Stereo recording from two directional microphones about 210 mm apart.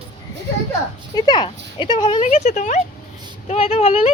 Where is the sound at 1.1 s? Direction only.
20° left (ahead or behind).